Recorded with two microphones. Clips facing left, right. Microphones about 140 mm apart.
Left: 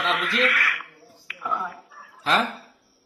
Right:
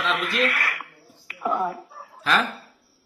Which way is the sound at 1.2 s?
35° right (ahead or behind).